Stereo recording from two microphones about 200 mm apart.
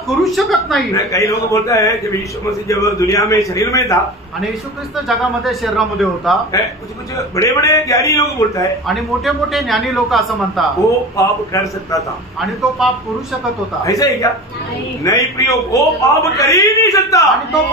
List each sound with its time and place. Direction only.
0.2 s a man's voice: centre (ahead or behind)
0.9 s a man's voice: 15° left (ahead or behind)
5.0 s a man's voice: centre (ahead or behind)
7.3 s a man's voice: 15° left (ahead or behind)
8.8 s a man's voice: centre (ahead or behind)
11.1 s a man's voice: 15° left (ahead or behind)
12.8 s a man's voice: centre (ahead or behind)
13.8 s a man's voice: 15° left (ahead or behind)
17.2 s a man's voice: centre (ahead or behind)